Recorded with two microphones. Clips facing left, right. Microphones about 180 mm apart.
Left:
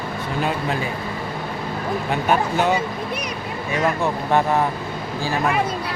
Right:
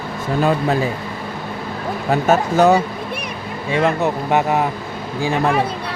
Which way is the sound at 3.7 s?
25° right (ahead or behind).